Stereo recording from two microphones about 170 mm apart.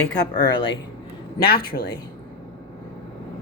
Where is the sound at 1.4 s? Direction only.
65° left (ahead or behind).